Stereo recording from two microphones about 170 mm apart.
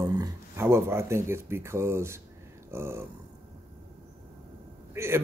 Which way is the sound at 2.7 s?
15° right (ahead or behind).